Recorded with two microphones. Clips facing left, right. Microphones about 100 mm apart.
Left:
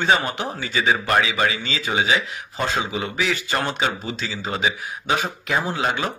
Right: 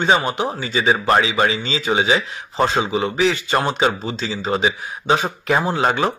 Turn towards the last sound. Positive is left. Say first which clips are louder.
# right 5 dB
turn(degrees=-35)  # may be behind; listen again after turning